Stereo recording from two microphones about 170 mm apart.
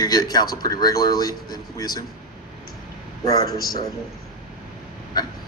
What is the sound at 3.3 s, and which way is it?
Speech, 20° left (ahead or behind).